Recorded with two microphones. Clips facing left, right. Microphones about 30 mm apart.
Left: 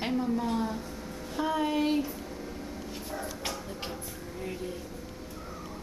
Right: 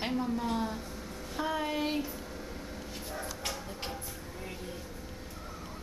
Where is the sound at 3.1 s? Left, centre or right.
Centre.